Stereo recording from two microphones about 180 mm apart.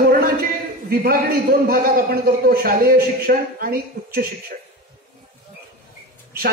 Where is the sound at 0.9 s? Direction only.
55° right (ahead or behind).